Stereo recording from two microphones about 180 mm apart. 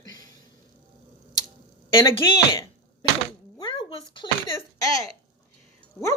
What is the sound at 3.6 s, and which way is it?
Speech, 25° left (ahead or behind).